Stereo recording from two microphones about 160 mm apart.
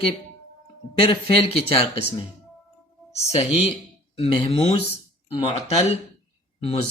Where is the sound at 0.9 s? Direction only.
35° left (ahead or behind).